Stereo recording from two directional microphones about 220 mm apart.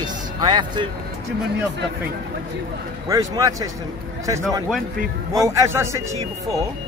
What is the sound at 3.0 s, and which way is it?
Speech, 15° right (ahead or behind).